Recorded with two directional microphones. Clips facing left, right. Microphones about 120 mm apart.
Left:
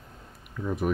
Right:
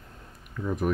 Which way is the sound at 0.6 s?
5° left (ahead or behind).